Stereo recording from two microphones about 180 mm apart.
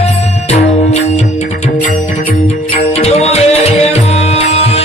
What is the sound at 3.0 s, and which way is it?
Music, 35° left (ahead or behind).